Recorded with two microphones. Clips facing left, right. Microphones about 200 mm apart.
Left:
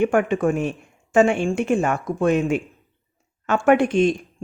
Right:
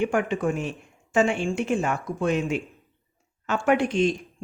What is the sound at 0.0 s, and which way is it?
Speech, 55° left (ahead or behind).